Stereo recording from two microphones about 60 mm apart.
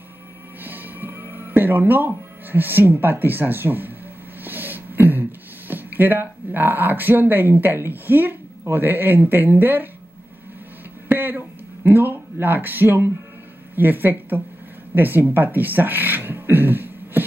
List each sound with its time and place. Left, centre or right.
0.6 s speech: right
4.4 s a sound: right
5.7 s speech: right
11.1 s speech: right